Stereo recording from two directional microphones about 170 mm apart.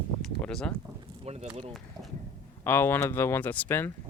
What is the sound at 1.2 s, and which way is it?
Speech, 40° right (ahead or behind).